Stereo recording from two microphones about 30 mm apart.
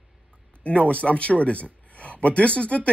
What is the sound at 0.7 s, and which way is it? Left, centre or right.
Speech, left.